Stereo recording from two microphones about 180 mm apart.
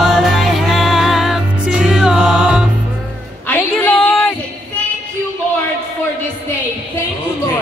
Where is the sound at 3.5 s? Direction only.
10° left (ahead or behind).